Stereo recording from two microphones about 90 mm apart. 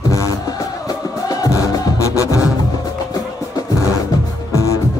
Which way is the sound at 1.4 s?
40° left (ahead or behind).